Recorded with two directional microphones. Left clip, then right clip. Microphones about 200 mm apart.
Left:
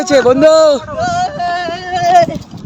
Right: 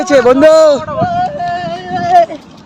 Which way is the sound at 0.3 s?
15° right (ahead or behind).